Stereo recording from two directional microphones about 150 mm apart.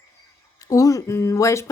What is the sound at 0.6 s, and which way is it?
Speech, 25° left (ahead or behind).